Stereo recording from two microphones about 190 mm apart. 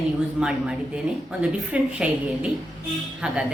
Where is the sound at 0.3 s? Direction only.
5° right (ahead or behind).